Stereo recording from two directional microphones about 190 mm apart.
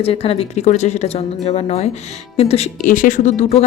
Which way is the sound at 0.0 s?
30° left (ahead or behind).